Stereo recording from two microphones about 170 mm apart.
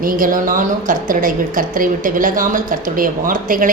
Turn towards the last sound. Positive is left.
turn(degrees=-55)  # may be behind; listen again after turning